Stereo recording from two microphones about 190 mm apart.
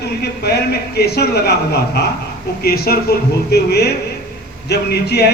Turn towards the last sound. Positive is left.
turn(degrees=60)  # may be behind; listen again after turning